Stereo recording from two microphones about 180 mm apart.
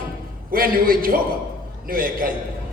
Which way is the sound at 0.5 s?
50° right (ahead or behind).